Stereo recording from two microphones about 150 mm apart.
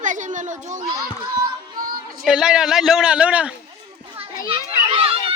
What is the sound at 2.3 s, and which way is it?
A man's voice, 5° right (ahead or behind).